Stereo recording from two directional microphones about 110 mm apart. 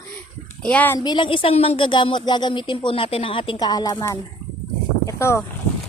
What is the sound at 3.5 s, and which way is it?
Speech, 40° left (ahead or behind).